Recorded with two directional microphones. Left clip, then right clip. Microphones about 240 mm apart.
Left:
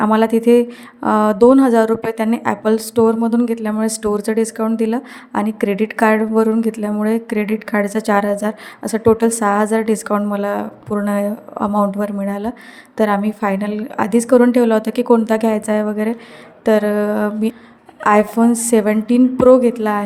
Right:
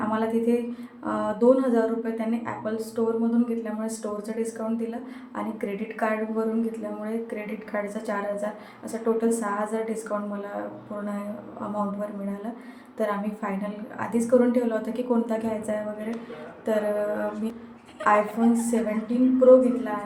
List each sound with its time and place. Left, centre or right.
0.1 s a woman's voice: left